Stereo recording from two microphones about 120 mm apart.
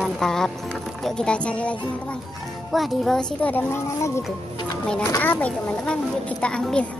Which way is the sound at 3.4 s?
15° left (ahead or behind).